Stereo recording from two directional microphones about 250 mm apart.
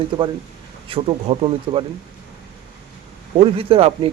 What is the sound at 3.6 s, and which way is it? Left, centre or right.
Speech, right.